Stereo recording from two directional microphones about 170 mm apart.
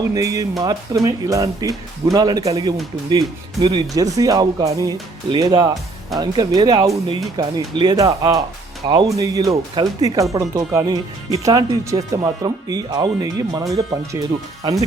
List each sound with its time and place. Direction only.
0.1 s speech: 20° right (ahead or behind)